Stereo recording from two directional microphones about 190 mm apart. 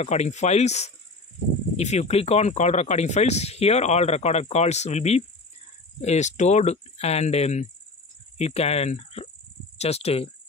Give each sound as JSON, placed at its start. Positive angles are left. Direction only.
{"t": 0.0, "sound": "speech", "side_deg": 35}